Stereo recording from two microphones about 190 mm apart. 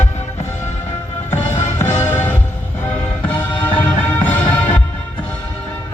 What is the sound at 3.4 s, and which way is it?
Music, 10° left (ahead or behind).